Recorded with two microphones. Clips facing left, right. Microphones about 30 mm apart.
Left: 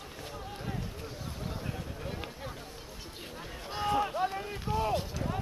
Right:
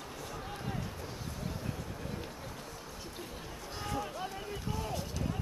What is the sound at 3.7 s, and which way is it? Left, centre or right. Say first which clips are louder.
Run: left 9 dB; left.